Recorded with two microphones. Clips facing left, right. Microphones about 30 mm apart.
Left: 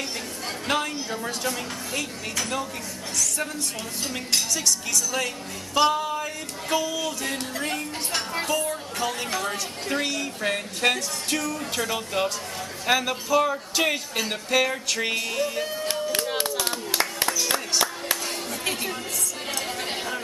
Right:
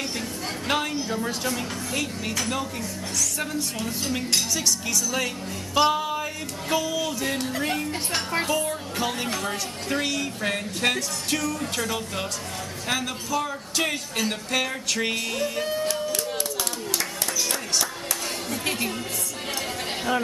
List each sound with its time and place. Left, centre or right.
0.7 s a woman's voice: centre
4.1 s a woman's voice: centre
5.8 s music: centre
6.7 s a woman's voice: centre
15.9 s a sound: left
17.5 s music: left
18.5 s speech: centre